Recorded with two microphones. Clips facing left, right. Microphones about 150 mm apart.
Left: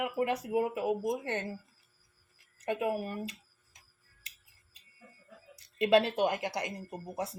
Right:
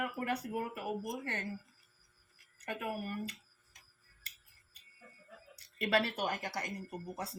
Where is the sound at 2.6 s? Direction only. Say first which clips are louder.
Left 7 dB; 20° left (ahead or behind).